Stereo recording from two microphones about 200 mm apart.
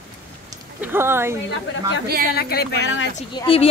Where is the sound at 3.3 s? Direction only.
25° left (ahead or behind).